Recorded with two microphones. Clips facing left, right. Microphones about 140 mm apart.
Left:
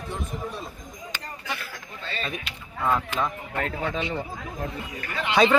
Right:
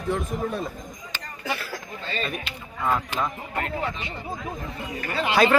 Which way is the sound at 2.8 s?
5° right (ahead or behind).